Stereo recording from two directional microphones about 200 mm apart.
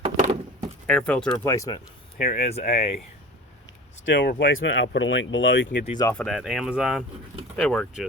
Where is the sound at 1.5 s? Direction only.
15° left (ahead or behind).